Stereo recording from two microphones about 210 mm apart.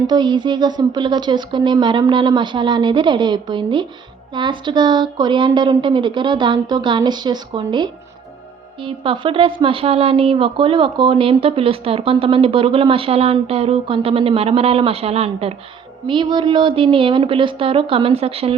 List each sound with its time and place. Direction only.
0.1 s speech: 20° right (ahead or behind)